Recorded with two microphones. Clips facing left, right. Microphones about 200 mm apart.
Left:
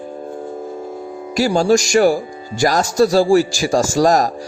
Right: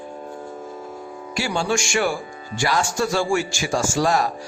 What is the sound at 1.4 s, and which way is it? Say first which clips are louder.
Speech: left 9 dB; 40° left (ahead or behind).